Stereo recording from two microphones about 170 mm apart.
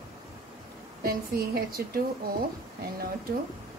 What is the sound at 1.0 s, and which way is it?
Speech, 65° right (ahead or behind).